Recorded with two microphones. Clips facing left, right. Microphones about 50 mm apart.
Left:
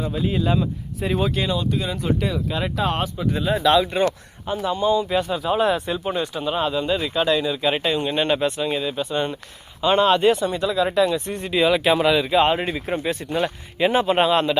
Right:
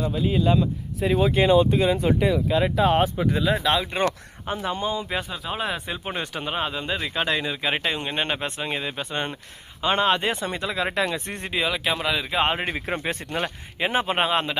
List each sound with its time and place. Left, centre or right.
0.1 s speech: centre
1.4 s speech: right
2.0 s speech: centre
2.5 s speech: centre
3.3 s speech: right
3.6 s speech: centre
5.3 s speech: centre
6.4 s speech: right
9.8 s speech: right
11.5 s speech: centre
12.3 s speech: right
13.7 s speech: centre